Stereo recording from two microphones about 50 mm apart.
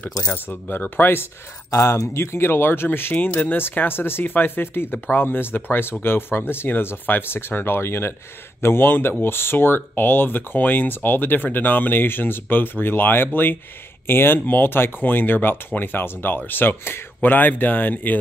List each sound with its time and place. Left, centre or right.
0.3 s speech: left
1.7 s speech: left
17.2 s speech: left